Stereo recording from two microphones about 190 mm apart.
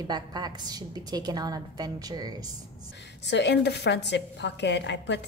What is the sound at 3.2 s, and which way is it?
A woman's voice, 65° left (ahead or behind).